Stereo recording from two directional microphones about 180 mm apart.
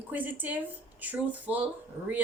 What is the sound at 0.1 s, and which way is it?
Speech, 10° right (ahead or behind).